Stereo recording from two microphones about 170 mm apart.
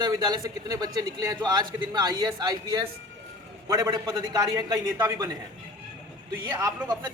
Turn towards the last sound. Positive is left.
turn(degrees=-20)  # may be behind; listen again after turning